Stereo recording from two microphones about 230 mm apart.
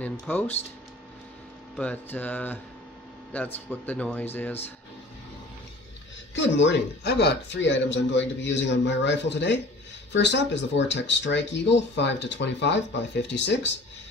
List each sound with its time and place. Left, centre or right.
0.0 s speech: centre
1.8 s mantra: centre
6.3 s speech: left